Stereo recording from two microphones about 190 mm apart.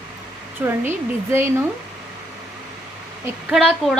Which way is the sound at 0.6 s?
15° right (ahead or behind).